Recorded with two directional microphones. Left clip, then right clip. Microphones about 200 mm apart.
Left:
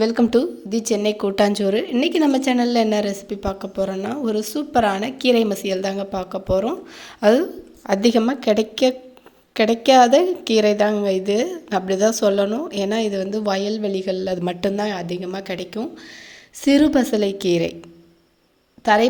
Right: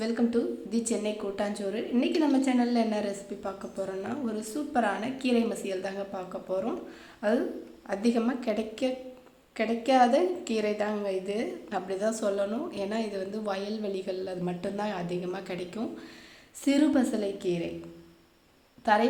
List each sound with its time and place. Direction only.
0.0 s a woman's voice: 50° left (ahead or behind)
7.9 s a woman's voice: 40° left (ahead or behind)
18.9 s a woman's voice: 40° left (ahead or behind)